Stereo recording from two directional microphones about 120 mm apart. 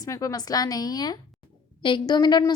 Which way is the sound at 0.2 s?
30° left (ahead or behind).